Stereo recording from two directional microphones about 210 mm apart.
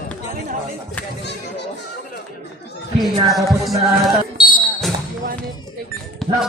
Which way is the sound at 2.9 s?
Centre (ahead or behind).